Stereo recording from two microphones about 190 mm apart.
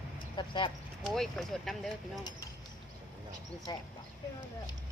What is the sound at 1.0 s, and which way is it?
Speech, centre (ahead or behind).